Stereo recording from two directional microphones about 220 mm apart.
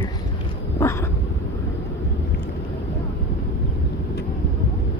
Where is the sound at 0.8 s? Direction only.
10° left (ahead or behind).